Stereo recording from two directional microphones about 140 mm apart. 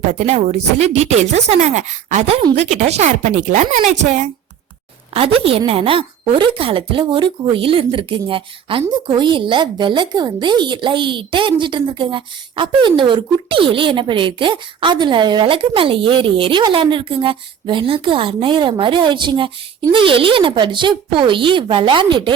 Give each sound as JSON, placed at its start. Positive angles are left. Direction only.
{"t": 0.1, "sound": "a woman's voice", "side_deg": -55}
{"t": 5.1, "sound": "speech", "side_deg": -40}